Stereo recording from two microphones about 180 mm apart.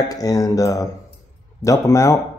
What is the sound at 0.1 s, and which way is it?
Speech, 20° left (ahead or behind).